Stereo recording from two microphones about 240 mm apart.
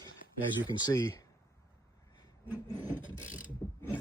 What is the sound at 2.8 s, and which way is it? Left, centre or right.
Vehicle, left.